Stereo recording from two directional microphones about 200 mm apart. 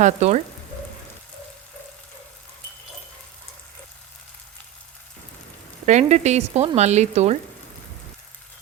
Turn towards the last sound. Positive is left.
turn(degrees=-35)  # may be behind; listen again after turning